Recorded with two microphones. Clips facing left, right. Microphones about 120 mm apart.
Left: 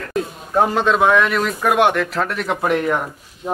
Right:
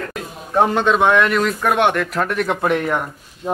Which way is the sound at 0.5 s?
Centre (ahead or behind).